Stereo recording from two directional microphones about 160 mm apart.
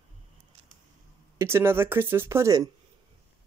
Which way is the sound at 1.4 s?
15° right (ahead or behind).